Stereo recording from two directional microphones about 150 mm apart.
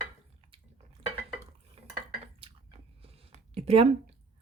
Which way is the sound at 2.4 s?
40° right (ahead or behind).